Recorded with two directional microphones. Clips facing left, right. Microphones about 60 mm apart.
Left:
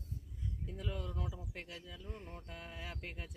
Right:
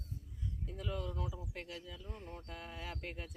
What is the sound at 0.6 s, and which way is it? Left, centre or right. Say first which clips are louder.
Speech: right 2 dB; centre.